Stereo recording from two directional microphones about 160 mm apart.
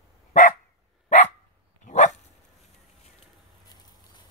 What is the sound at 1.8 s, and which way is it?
Dog, 50° left (ahead or behind).